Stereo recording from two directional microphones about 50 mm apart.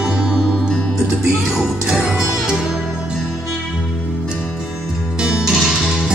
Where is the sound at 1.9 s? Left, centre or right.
Centre.